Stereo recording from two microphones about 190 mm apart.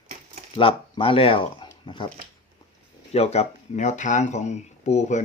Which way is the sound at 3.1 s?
35° left (ahead or behind).